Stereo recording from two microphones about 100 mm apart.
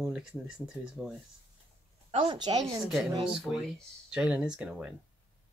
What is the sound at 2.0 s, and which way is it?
Speech, 55° right (ahead or behind).